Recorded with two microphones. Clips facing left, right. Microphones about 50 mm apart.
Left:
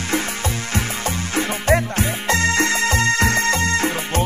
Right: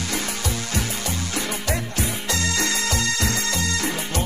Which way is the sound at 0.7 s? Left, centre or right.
Left.